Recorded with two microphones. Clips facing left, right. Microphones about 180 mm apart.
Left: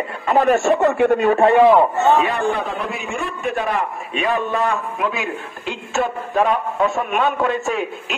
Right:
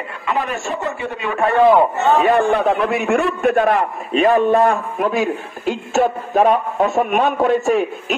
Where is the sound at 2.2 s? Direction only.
50° right (ahead or behind).